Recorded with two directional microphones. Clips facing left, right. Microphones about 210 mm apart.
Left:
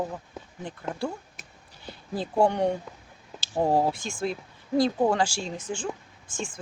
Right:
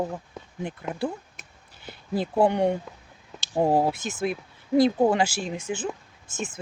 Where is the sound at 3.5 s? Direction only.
10° right (ahead or behind).